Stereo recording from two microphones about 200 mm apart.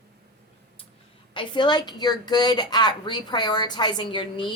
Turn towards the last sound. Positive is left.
turn(degrees=25)  # may be behind; listen again after turning